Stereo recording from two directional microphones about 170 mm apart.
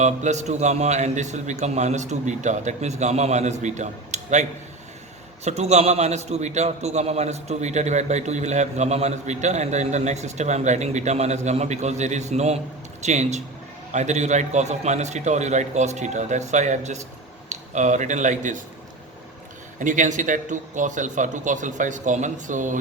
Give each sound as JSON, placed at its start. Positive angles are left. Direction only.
{"t": 0.0, "sound": "a man's voice", "side_deg": -45}
{"t": 5.5, "sound": "a man's voice", "side_deg": -40}
{"t": 19.8, "sound": "a man's voice", "side_deg": -50}